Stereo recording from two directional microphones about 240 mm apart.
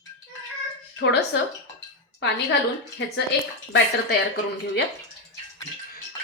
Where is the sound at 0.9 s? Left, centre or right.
Left.